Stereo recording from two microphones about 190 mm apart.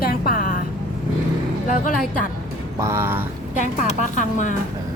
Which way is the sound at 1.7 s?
45° left (ahead or behind).